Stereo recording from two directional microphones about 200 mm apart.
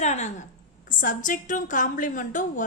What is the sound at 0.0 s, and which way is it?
A woman's voice, 35° left (ahead or behind).